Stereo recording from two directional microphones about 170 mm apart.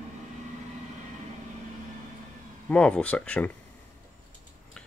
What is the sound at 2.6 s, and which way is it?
Speech, 5° left (ahead or behind).